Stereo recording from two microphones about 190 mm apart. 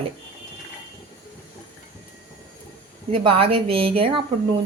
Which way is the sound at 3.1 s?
25° right (ahead or behind).